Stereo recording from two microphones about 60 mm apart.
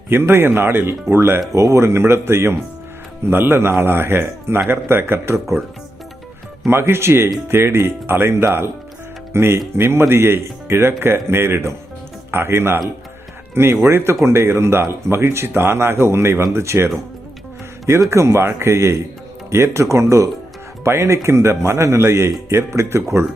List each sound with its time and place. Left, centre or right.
0.1 s speech: right
6.7 s speech: right
18.1 s speech: right